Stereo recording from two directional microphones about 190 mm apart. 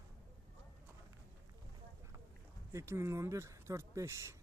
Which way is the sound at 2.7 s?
15° right (ahead or behind).